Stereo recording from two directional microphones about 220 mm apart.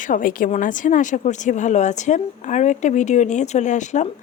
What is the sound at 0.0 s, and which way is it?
Speech, 40° left (ahead or behind).